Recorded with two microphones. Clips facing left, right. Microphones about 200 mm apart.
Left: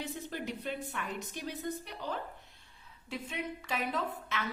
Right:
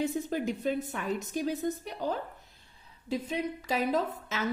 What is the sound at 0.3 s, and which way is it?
A woman's voice, 45° right (ahead or behind).